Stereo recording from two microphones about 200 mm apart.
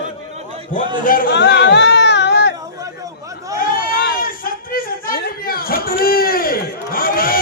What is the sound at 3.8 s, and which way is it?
Chatter, 45° left (ahead or behind).